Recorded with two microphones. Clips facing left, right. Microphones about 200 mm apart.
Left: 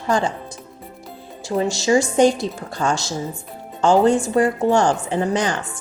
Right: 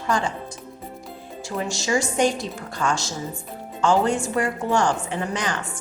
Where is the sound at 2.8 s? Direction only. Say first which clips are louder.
Left 3 dB; 40° left (ahead or behind).